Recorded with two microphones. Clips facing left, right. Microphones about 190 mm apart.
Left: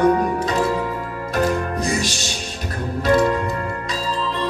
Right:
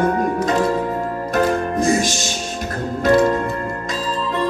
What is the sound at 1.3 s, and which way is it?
Music, 50° right (ahead or behind).